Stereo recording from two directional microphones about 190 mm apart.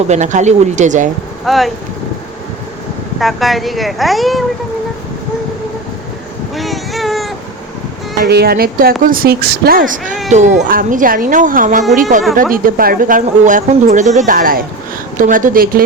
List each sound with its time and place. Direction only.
0.1 s speech: 40° right (ahead or behind)
1.5 s speech: centre (ahead or behind)
3.2 s speech: centre (ahead or behind)
6.6 s a sound: centre (ahead or behind)
8.2 s speech: 55° right (ahead or behind)